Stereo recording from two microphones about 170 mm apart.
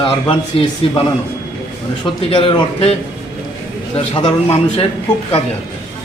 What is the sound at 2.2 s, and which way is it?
Speech, 35° left (ahead or behind).